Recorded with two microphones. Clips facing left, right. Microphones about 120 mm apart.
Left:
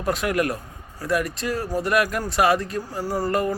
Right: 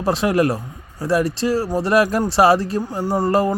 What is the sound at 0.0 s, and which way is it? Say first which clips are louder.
Speech: right 5 dB; 30° right (ahead or behind).